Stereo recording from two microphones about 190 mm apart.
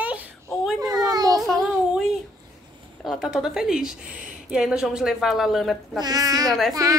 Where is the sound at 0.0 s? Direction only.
10° right (ahead or behind).